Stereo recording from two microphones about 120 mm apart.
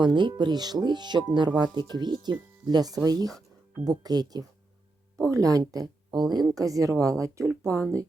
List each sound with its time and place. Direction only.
0.0 s speech: 40° right (ahead or behind); by 8.0 s 25° right (ahead or behind)